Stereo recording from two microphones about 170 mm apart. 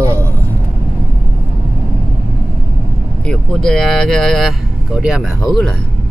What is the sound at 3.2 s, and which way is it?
Speech, 5° left (ahead or behind).